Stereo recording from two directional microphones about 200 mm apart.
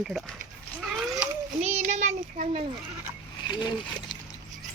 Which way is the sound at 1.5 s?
35° right (ahead or behind).